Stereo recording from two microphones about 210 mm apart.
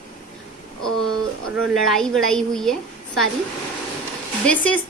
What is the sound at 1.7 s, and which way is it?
A woman's voice, centre (ahead or behind).